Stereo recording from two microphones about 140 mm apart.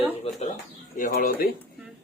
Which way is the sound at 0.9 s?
85° left.